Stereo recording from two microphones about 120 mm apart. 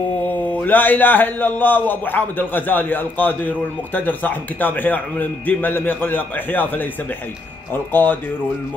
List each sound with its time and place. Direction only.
0.2 s a man's voice: 15° left (ahead or behind)